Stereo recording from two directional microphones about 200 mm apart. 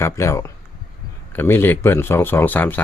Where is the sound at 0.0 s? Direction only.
15° left (ahead or behind).